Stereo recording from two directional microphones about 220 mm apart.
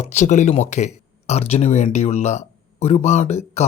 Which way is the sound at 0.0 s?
30° left (ahead or behind).